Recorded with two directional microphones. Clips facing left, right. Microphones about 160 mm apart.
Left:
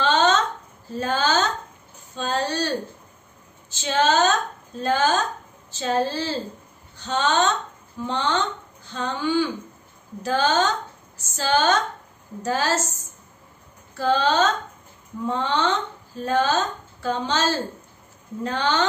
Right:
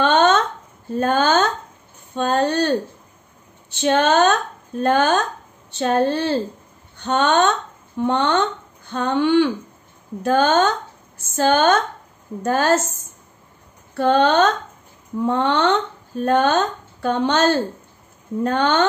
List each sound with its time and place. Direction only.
0.0 s a sound: 55° right (ahead or behind)
0.9 s a woman's voice: 55° right (ahead or behind)
3.7 s a woman's voice: 60° right (ahead or behind)